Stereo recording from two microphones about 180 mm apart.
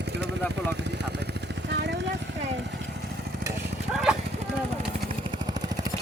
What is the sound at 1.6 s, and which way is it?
Vehicle, 70° right (ahead or behind).